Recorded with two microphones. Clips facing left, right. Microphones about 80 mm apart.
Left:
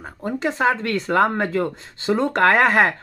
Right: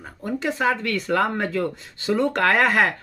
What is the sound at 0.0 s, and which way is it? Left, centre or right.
Speech, left.